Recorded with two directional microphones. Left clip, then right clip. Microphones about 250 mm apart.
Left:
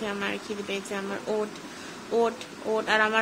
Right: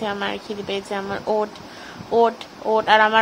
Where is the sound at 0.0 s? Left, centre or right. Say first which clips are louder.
Right 6 dB; centre.